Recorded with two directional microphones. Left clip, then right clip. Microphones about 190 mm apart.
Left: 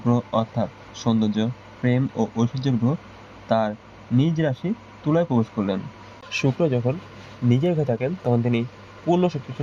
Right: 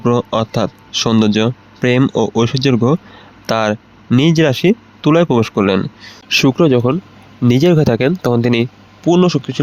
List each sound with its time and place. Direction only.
0.0 s a man's voice: 60° right (ahead or behind)
7.4 s speech: 50° right (ahead or behind)